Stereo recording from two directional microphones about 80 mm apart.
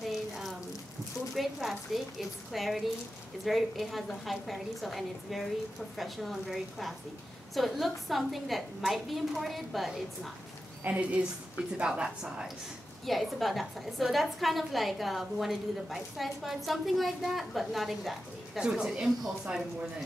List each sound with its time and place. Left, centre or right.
0.0 s a sound: centre
1.3 s a woman's voice: centre
10.8 s a woman's voice: centre
13.0 s a woman's voice: centre